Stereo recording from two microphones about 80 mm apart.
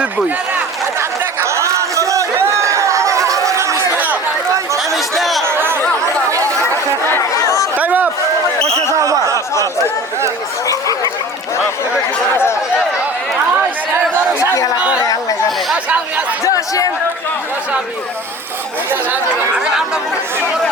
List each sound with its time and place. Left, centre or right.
0.9 s chatter: right
3.9 s chatter: right
4.9 s chatter: centre
5.5 s chatter: right
7.3 s chatter: left
7.8 s speech: centre
8.9 s speech: right
13.5 s chatter: right
15.0 s speech: left
15.7 s speech: centre
16.4 s speech: left
19.5 s speech: centre